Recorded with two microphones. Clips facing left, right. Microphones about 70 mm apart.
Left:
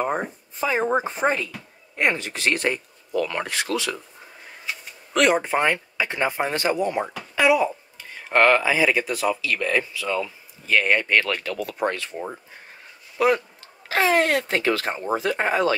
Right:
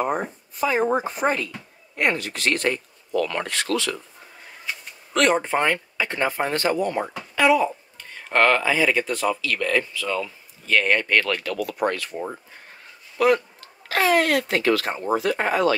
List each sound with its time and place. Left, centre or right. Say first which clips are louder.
0.6 s speech: right 1 dB; left
4.6 s speech: even; centre; by 12.1 s left
13.2 s speech: right 1 dB; left